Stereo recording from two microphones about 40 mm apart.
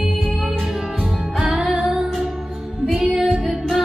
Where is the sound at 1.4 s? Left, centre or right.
Centre.